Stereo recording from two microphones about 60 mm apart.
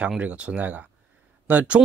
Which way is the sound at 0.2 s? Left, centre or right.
Right.